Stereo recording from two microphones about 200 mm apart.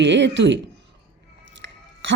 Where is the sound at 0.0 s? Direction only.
65° right (ahead or behind).